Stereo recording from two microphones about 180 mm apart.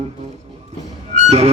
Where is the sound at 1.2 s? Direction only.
40° right (ahead or behind).